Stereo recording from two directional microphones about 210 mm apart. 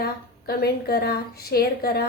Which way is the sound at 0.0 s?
45° left (ahead or behind).